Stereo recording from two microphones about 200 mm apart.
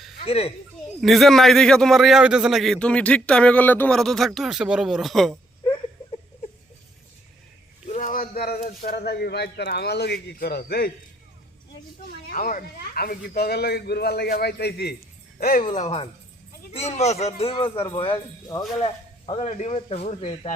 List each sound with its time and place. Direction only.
0.3 s speech: 30° left (ahead or behind)
1.0 s a man's voice: centre (ahead or behind)
7.9 s speech: 40° left (ahead or behind)
12.0 s speech: 45° left (ahead or behind)
15.7 s speech: 35° left (ahead or behind)